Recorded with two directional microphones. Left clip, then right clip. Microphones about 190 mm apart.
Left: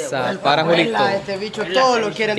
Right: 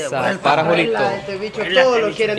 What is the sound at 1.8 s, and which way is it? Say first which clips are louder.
Speech: right 2 dB; 55° left (ahead or behind).